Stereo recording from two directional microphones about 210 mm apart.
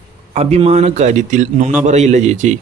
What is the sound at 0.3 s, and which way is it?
Speech, 30° right (ahead or behind).